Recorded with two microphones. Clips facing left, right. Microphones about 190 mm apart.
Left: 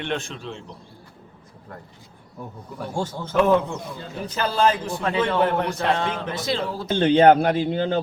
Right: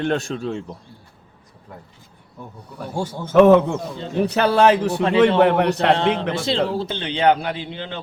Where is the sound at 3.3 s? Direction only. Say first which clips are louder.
Right 7 dB; 70° right (ahead or behind).